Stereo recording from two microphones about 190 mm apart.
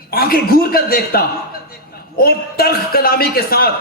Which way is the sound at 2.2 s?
55° left (ahead or behind).